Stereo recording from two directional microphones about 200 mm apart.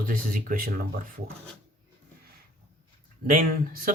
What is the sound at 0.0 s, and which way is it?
Speech, 45° right (ahead or behind).